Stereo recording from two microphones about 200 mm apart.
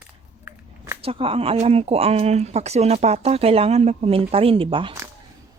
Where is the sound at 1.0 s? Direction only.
30° right (ahead or behind).